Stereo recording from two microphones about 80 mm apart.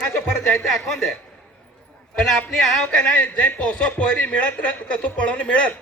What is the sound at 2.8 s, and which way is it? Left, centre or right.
Speech, centre.